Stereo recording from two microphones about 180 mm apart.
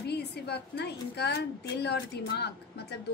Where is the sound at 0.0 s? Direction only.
65° left (ahead or behind).